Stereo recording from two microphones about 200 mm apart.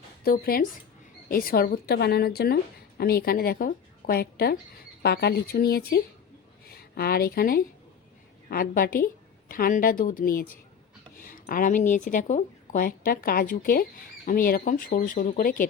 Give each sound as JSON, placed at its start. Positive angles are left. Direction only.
{"t": 0.3, "sound": "a woman's voice", "side_deg": 45}